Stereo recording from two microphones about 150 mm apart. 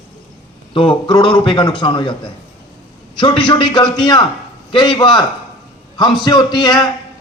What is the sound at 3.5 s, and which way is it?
A man's voice, 35° left (ahead or behind).